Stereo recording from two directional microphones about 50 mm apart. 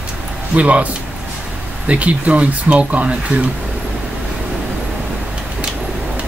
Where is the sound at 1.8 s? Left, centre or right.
Right.